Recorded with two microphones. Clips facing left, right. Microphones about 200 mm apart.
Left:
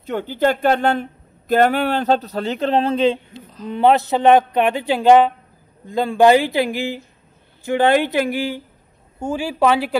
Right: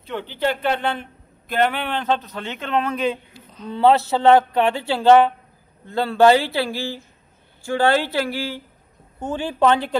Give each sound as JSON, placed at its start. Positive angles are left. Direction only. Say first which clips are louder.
{"t": 0.0, "sound": "speech", "louder": "left 5 dB", "side_deg": 45}
{"t": 3.6, "sound": "speech", "louder": "left 1 dB", "side_deg": 15}